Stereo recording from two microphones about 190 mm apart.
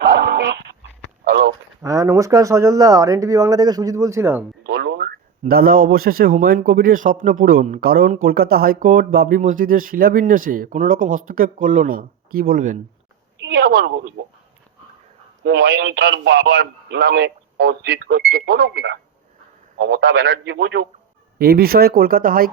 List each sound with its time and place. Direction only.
0.0 s dog: 60° right (ahead or behind)
1.2 s a sound: 60° right (ahead or behind)
1.8 s speech: 15° right (ahead or behind)
4.6 s a sound: 65° right (ahead or behind)
5.4 s a man's voice: 50° right (ahead or behind)
13.4 s a woman's voice: 65° right (ahead or behind)
15.4 s a man's voice: 60° right (ahead or behind)